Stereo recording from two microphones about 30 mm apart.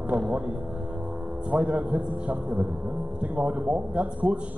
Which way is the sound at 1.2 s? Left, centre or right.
Right.